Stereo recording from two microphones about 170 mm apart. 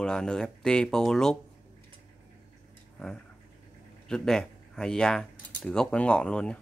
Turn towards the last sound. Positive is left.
turn(degrees=5)  # may be behind; listen again after turning